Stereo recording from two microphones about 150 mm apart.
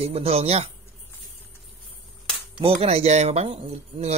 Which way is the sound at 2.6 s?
45° right (ahead or behind).